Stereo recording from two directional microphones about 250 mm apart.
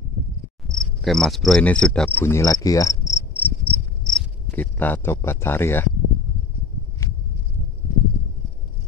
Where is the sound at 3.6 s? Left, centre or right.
Centre.